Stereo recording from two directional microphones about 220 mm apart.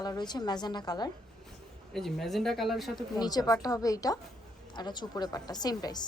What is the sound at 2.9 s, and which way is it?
Speech, 20° left (ahead or behind).